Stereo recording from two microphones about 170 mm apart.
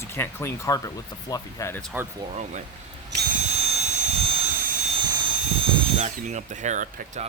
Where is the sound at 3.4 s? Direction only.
40° right (ahead or behind).